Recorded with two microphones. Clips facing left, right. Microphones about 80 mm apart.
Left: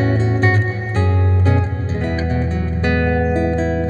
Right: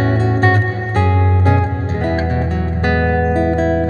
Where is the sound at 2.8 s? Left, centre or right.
Right.